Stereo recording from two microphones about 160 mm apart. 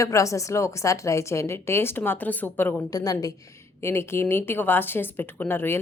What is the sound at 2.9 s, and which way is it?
A woman's voice, 25° left (ahead or behind).